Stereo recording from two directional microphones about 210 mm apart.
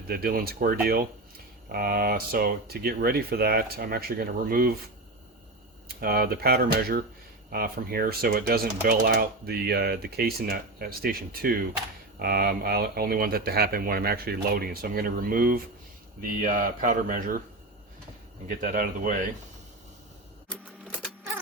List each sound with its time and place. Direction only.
0.1 s speech: 45° right (ahead or behind)
5.9 s speech: 45° right (ahead or behind)
18.6 s speech: 40° right (ahead or behind)